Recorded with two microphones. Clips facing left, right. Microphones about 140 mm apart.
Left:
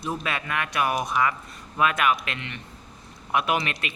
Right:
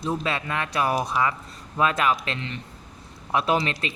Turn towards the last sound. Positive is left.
turn(degrees=-30)  # may be behind; listen again after turning